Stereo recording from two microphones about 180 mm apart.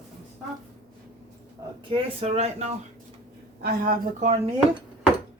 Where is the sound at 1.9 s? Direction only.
30° right (ahead or behind).